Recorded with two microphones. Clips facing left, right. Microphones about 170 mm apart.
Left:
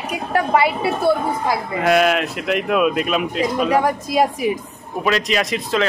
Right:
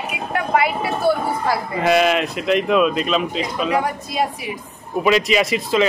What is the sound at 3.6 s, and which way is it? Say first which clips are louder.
Speech: left 3 dB; 40° left (ahead or behind).